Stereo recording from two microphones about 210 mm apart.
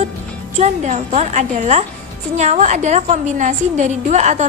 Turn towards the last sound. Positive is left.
turn(degrees=-35)  # may be behind; listen again after turning